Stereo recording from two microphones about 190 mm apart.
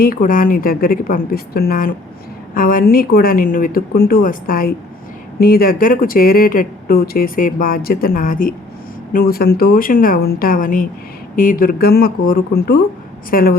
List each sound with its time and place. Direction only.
0.0 s speech: 50° left (ahead or behind)